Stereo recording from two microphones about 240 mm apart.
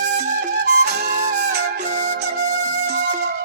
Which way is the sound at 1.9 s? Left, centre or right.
Right.